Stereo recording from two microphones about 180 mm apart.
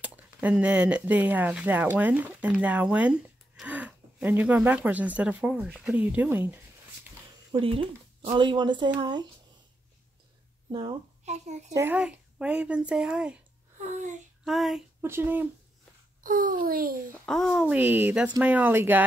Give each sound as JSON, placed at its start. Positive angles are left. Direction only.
{"t": 0.0, "sound": "speech", "side_deg": -10}
{"t": 7.5, "sound": "speech", "side_deg": -30}
{"t": 10.7, "sound": "speech", "side_deg": -25}
{"t": 11.2, "sound": "a child's voice", "side_deg": -40}
{"t": 11.7, "sound": "speech", "side_deg": -10}
{"t": 14.4, "sound": "female singing", "side_deg": 0}
{"t": 15.0, "sound": "speech", "side_deg": -10}
{"t": 16.2, "sound": "a child's voice", "side_deg": -50}
{"t": 17.3, "sound": "speech", "side_deg": 0}